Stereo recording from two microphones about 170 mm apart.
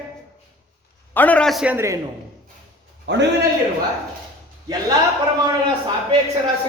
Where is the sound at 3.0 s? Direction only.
90° right.